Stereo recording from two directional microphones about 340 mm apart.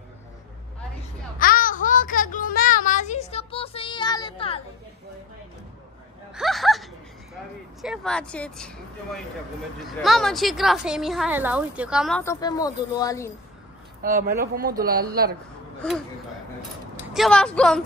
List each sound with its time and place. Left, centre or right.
1.4 s a sound: left
6.3 s a sound: centre
7.8 s a woman's voice: centre
14.4 s a man's voice: right
15.8 s a woman's voice: centre
17.1 s a woman's voice: centre